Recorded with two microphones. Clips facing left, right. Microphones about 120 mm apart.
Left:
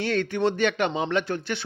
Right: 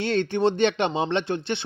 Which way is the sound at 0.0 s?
25° right (ahead or behind).